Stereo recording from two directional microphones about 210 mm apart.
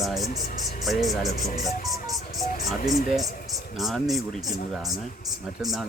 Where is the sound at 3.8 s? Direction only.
Centre (ahead or behind).